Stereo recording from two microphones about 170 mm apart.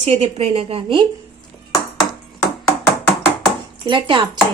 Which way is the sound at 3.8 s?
30° right (ahead or behind).